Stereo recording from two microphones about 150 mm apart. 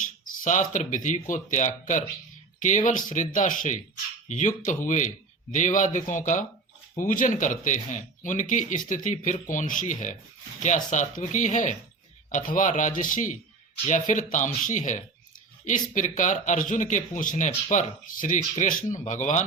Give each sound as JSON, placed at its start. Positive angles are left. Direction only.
{"t": 0.0, "sound": "speech", "side_deg": 55}